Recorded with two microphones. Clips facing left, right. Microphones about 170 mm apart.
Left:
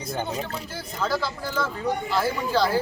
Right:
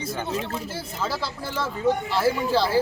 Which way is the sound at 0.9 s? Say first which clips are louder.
Left 4 dB; 5° right (ahead or behind).